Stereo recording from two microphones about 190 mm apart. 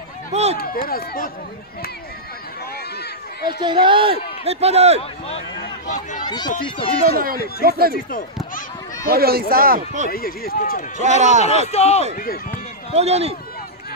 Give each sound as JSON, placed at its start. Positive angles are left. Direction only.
{"t": 0.3, "sound": "speech", "side_deg": -35}
{"t": 0.6, "sound": "speech", "side_deg": 50}
{"t": 3.6, "sound": "speech", "side_deg": -25}
{"t": 6.2, "sound": "speech", "side_deg": 20}
{"t": 7.2, "sound": "speech", "side_deg": -50}
{"t": 9.0, "sound": "speech", "side_deg": -55}
{"t": 10.0, "sound": "speech", "side_deg": 50}
{"t": 11.0, "sound": "speech", "side_deg": -40}
{"t": 11.4, "sound": "speech", "side_deg": 35}
{"t": 12.2, "sound": "speech", "side_deg": 45}
{"t": 12.9, "sound": "speech", "side_deg": -35}